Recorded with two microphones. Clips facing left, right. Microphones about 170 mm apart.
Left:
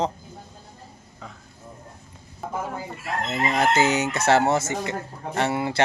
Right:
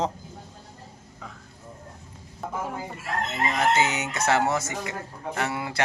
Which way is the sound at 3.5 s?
35° left (ahead or behind).